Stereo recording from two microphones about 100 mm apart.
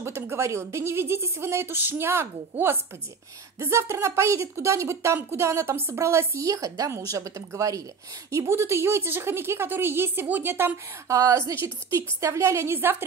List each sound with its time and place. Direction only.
0.0 s a woman's voice: 25° right (ahead or behind)